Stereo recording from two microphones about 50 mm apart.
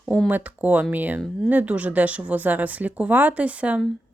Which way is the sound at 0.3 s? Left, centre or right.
Right.